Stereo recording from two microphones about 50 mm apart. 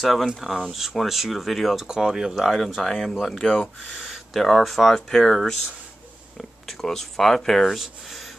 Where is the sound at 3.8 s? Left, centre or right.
Centre.